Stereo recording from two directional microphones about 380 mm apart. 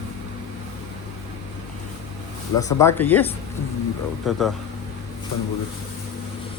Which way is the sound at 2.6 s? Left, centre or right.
Centre.